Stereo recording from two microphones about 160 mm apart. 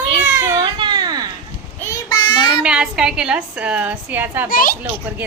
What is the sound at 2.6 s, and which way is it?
A woman's voice, 5° right (ahead or behind).